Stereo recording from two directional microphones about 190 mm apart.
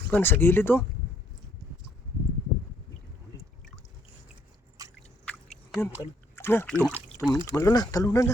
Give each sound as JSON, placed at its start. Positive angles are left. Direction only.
{"t": 0.1, "sound": "speech", "side_deg": 10}
{"t": 4.8, "sound": "a sound", "side_deg": -20}
{"t": 5.8, "sound": "speech", "side_deg": 10}
{"t": 7.2, "sound": "speech", "side_deg": 15}